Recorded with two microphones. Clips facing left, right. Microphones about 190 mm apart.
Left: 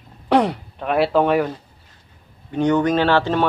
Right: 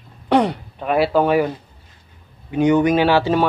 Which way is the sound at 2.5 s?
10° right (ahead or behind).